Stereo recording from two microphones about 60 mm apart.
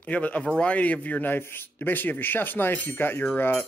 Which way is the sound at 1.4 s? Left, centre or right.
Left.